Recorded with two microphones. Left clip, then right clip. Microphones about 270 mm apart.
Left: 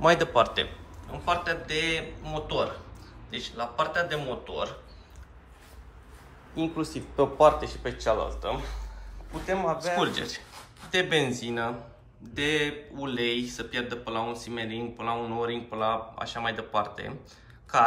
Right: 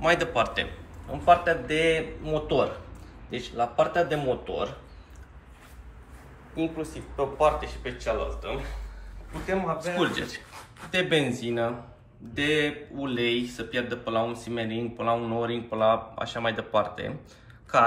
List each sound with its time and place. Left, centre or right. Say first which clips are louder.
0.0 s a man's voice: left 2 dB; centre
1.2 s speech: right 7 dB; centre
6.5 s a man's voice: even; centre
7.2 s speech: left 3 dB; left
9.5 s speech: left 1 dB; centre